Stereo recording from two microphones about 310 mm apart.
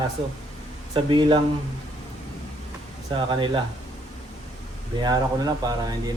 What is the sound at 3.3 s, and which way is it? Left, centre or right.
Speech, centre.